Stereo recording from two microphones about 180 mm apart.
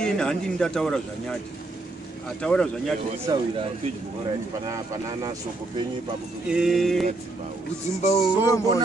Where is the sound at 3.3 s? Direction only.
20° right (ahead or behind).